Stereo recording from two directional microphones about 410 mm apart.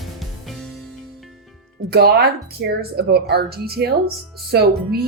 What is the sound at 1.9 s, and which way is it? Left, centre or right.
Speech, right.